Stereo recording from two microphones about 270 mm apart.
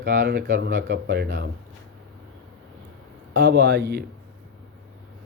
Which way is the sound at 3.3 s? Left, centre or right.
Right.